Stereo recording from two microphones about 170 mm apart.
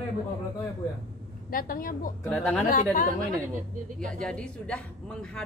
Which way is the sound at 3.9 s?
5° left (ahead or behind).